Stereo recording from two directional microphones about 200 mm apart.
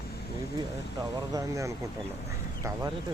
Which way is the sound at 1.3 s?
15° right (ahead or behind).